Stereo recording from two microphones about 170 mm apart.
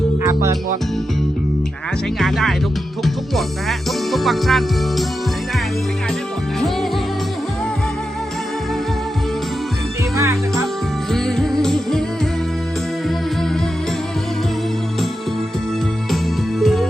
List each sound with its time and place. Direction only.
0.2 s music: 15° right (ahead or behind)
2.1 s speech: centre (ahead or behind)
10.2 s music: 20° right (ahead or behind)
11.1 s music: centre (ahead or behind)
16.6 s music: centre (ahead or behind)